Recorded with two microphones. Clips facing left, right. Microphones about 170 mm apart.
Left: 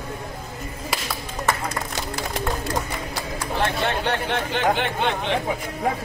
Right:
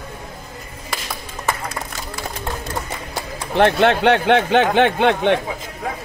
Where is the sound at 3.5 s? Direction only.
70° right (ahead or behind).